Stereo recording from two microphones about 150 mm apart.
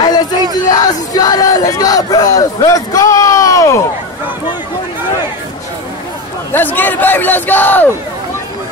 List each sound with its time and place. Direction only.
0.7 s speech: 25° left (ahead or behind)
6.5 s a man's voice: 10° left (ahead or behind)